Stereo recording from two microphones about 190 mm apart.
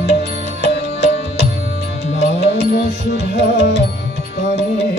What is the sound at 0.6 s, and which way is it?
Music, 65° left (ahead or behind).